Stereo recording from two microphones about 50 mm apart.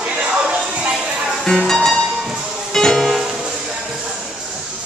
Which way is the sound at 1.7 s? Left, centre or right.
Centre.